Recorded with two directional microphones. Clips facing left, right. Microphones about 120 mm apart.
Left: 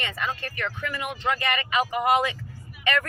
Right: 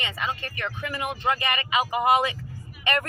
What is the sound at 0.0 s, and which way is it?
Speech, 15° right (ahead or behind).